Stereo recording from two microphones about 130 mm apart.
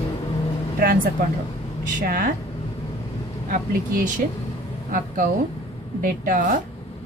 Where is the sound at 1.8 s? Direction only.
90° right.